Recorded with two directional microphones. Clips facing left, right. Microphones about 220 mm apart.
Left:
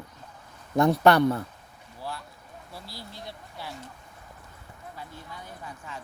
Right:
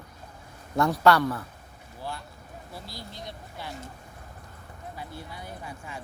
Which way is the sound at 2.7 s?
5° left (ahead or behind).